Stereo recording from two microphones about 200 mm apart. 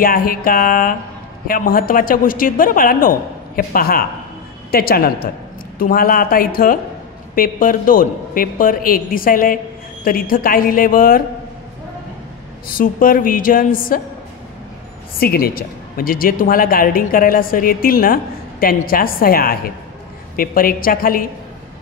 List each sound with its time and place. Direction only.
0.0 s a woman's voice: 45° left (ahead or behind)
12.7 s a woman's voice: 45° left (ahead or behind)
15.1 s a woman's voice: 50° left (ahead or behind)